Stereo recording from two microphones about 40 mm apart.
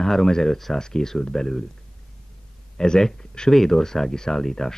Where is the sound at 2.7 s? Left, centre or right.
Centre.